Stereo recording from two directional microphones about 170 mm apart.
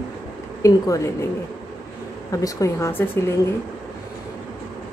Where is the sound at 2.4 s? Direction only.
20° left (ahead or behind).